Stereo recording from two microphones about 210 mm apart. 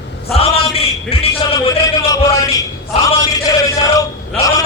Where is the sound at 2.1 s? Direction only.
15° left (ahead or behind).